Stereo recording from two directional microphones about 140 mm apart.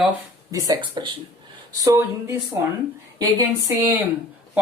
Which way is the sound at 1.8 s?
20° right (ahead or behind).